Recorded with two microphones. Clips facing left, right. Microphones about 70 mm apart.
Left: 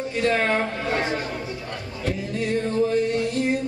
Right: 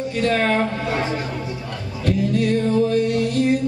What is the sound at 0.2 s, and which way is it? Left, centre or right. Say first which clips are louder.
Speech: right 2 dB; centre.